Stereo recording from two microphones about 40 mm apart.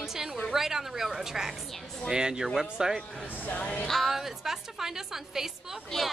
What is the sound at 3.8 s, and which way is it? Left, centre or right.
Speech, centre.